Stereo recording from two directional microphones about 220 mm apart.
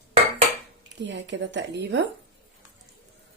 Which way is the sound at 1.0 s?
55° right (ahead or behind).